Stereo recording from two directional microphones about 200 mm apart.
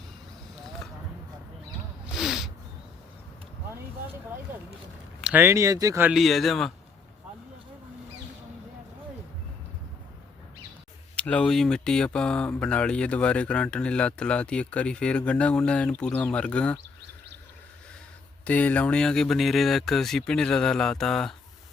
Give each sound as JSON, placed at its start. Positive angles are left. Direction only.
{"t": 2.1, "sound": "a sound", "side_deg": 0}
{"t": 5.2, "sound": "speech", "side_deg": -10}
{"t": 11.2, "sound": "speech", "side_deg": 5}
{"t": 18.4, "sound": "speech", "side_deg": 5}